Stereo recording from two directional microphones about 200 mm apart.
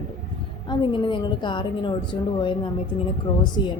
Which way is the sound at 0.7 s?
25° left (ahead or behind).